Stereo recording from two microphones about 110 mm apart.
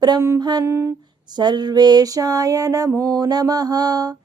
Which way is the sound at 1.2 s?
40° right (ahead or behind).